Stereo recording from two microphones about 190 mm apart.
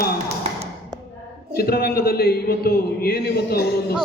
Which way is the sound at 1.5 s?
55° left (ahead or behind).